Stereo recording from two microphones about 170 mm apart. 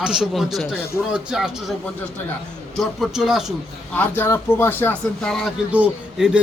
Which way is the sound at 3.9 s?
10° left (ahead or behind).